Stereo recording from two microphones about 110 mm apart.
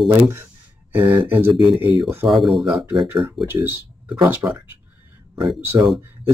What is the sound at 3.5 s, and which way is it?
Speech, 20° right (ahead or behind).